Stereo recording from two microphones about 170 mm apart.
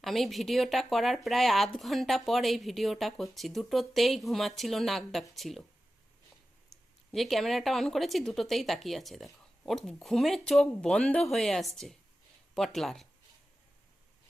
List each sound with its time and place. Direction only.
0.0 s speech: centre (ahead or behind)
6.7 s speech: centre (ahead or behind)